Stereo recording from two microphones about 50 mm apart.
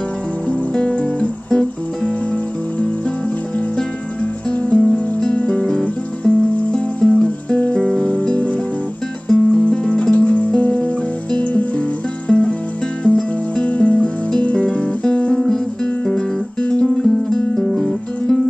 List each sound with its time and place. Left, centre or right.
0.5 s music: left
1.5 s music: centre
4.2 s music: left
9.3 s music: centre
10.1 s music: left
14.0 s music: centre
15.4 s guitar: centre
16.8 s music: centre